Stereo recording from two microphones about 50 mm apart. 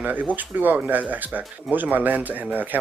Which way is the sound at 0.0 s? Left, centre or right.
Right.